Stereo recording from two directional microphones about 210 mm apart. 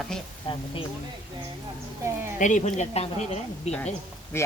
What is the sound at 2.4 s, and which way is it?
Speech, 35° left (ahead or behind).